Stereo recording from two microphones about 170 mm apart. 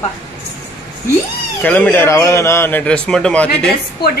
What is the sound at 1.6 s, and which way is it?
Speech, 10° left (ahead or behind).